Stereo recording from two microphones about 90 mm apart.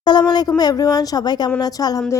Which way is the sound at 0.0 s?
50° left (ahead or behind).